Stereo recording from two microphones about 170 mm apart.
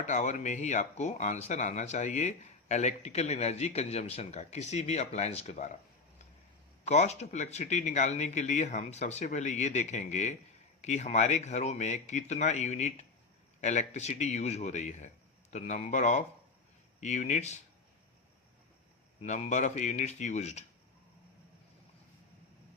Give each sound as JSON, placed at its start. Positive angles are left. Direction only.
{"t": 0.0, "sound": "speech", "side_deg": 45}
{"t": 6.8, "sound": "speech", "side_deg": 40}
{"t": 19.2, "sound": "speech", "side_deg": 45}